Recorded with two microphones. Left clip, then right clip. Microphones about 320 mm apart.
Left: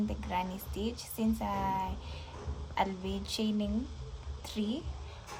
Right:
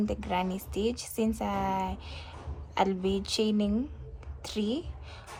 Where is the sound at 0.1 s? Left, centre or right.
Right.